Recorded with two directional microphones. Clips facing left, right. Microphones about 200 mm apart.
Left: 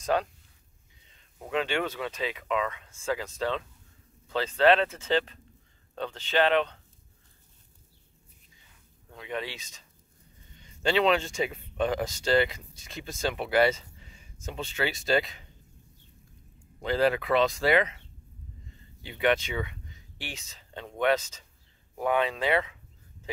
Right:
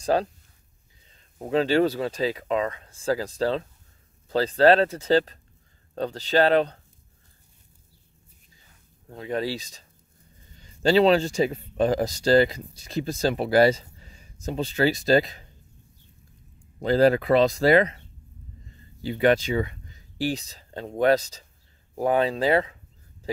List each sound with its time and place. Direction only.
0.0 s speech: 35° right (ahead or behind)
1.4 s speech: 35° right (ahead or behind)
9.1 s speech: 35° right (ahead or behind)
16.8 s speech: 40° right (ahead or behind)